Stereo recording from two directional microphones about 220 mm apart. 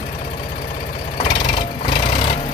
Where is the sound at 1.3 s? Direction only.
25° left (ahead or behind).